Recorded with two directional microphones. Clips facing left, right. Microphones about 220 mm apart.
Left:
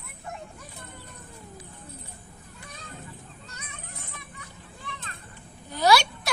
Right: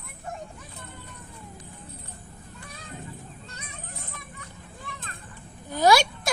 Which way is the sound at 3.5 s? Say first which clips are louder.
Right 2 dB; 35° right (ahead or behind).